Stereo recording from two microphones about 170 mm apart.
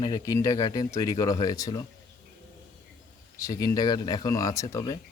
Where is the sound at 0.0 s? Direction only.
20° left (ahead or behind).